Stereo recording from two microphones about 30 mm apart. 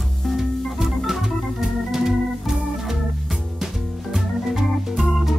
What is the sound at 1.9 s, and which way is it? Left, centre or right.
Organ, centre.